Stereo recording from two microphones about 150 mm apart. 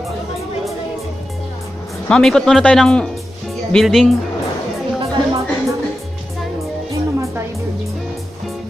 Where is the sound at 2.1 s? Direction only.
5° left (ahead or behind).